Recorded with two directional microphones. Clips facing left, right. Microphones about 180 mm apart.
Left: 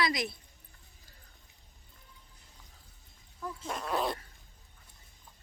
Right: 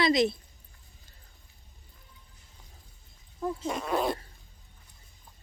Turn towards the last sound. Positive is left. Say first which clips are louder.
# right 4 dB
turn(degrees=0)  # may be behind; listen again after turning